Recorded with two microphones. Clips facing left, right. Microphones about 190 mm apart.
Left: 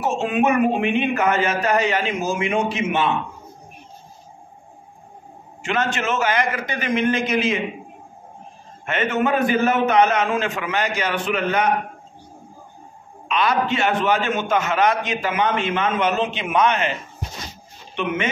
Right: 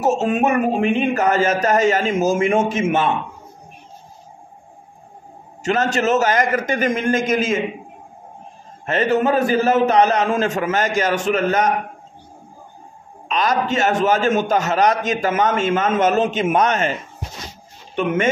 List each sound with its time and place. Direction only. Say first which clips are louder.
0.0 s a man's voice: right 2 dB; 40° right (ahead or behind)
5.6 s a man's voice: right 4 dB; 40° right (ahead or behind)
8.8 s a man's voice: right 4 dB; 35° right (ahead or behind)
13.3 s a man's voice: right 1 dB; 40° right (ahead or behind)
17.9 s a man's voice: right 5 dB; 45° right (ahead or behind)